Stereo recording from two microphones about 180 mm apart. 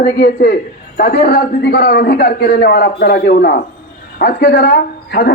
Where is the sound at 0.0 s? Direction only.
60° left (ahead or behind).